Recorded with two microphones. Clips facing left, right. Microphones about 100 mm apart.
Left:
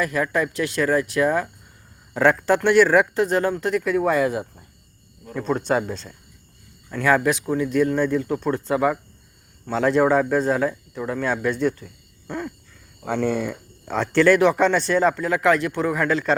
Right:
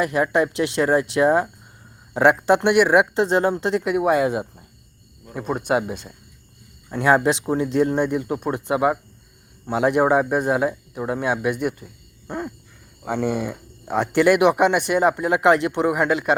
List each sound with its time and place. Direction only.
0.0 s speech: 20° right (ahead or behind)
12.3 s owl: 20° right (ahead or behind)
13.1 s speech: 15° right (ahead or behind)